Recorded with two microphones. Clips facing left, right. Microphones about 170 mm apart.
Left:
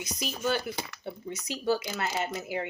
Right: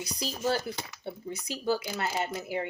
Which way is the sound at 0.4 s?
30° right (ahead or behind).